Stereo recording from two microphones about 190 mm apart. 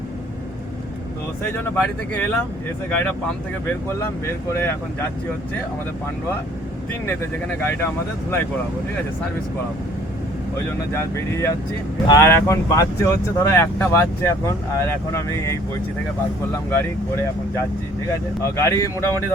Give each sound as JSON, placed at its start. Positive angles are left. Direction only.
{"t": 1.5, "sound": "speech", "side_deg": 10}
{"t": 4.5, "sound": "speech", "side_deg": 10}
{"t": 7.6, "sound": "speech", "side_deg": 10}
{"t": 10.9, "sound": "speech", "side_deg": 15}
{"t": 16.7, "sound": "speech", "side_deg": 15}